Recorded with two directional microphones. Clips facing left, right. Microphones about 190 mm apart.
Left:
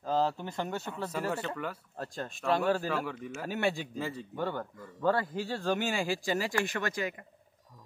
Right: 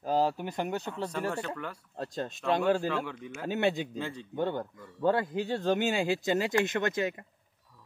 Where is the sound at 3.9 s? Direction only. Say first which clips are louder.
Even; 5° left (ahead or behind).